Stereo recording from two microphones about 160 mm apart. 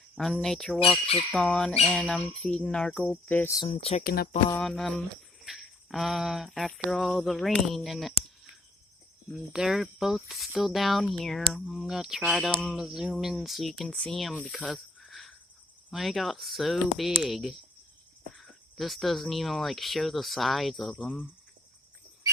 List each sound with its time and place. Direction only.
0.2 s speech: 5° left (ahead or behind)
3.6 s speech: 35° left (ahead or behind)
4.0 s speech: 75° left (ahead or behind)
4.6 s speech: 5° left (ahead or behind)
9.5 s speech: 5° right (ahead or behind)
14.3 s snake: 5° left (ahead or behind)
15.9 s speech: centre (ahead or behind)